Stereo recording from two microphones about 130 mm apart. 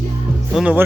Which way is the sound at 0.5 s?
10° right (ahead or behind).